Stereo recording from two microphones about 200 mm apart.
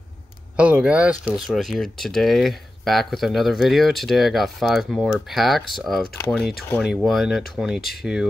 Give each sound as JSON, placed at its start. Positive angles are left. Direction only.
{"t": 0.6, "sound": "speech", "side_deg": -5}